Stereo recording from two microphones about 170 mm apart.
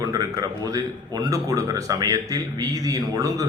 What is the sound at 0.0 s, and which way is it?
A man's voice, 20° right (ahead or behind).